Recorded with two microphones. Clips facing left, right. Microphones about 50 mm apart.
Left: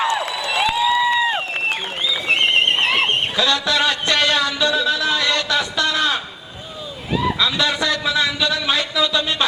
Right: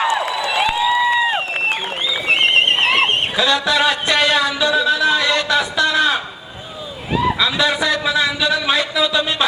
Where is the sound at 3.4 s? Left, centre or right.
Centre.